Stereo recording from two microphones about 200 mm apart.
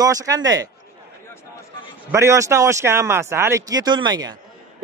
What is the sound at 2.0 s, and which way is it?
Speech, 15° right (ahead or behind).